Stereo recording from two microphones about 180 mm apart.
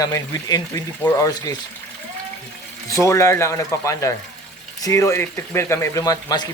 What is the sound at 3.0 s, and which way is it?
Speech, 15° left (ahead or behind).